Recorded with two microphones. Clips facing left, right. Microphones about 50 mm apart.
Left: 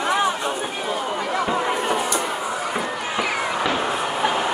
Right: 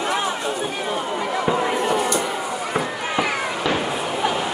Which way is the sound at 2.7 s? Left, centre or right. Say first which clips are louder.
Right 2 dB; centre.